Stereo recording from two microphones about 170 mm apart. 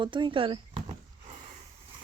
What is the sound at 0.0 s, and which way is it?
Speech, 30° right (ahead or behind).